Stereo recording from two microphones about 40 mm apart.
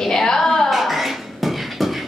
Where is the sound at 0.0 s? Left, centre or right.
Centre.